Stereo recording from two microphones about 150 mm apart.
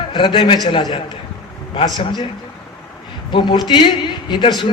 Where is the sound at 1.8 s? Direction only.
30° left (ahead or behind).